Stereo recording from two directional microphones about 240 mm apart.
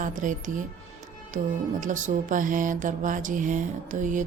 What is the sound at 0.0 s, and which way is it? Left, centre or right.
Speech, right.